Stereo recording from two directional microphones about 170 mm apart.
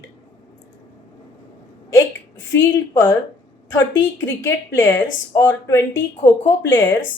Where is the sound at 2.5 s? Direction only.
15° left (ahead or behind).